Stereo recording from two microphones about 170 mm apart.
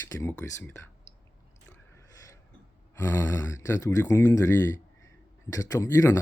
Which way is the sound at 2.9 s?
15° left (ahead or behind).